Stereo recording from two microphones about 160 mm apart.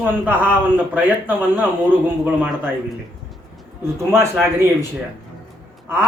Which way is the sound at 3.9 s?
15° right (ahead or behind).